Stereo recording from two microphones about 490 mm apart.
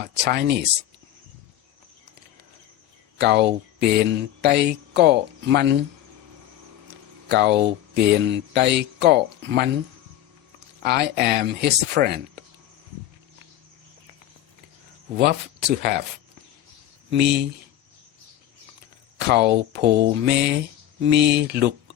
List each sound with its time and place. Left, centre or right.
0.0 s speech: centre
3.2 s speech: right
7.3 s speech: right
10.8 s speech: centre
15.2 s speech: centre
17.1 s speech: centre
19.3 s speech: right